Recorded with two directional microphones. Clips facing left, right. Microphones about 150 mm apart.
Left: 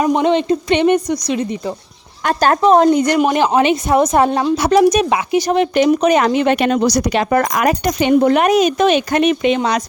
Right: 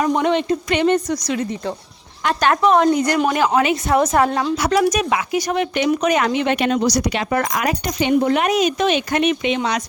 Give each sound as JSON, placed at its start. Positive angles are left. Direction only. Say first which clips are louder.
{"t": 0.0, "sound": "speech", "louder": "left 3 dB", "side_deg": 20}
{"t": 2.2, "sound": "a woman's voice", "louder": "left 3 dB", "side_deg": 40}
{"t": 3.0, "sound": "a woman's voice", "louder": "left 4 dB", "side_deg": 20}